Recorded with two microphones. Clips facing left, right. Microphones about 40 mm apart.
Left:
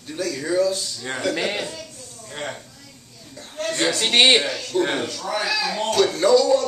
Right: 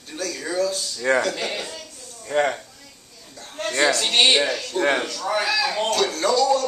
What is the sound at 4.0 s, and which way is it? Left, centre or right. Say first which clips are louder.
Speech: left 6 dB; left.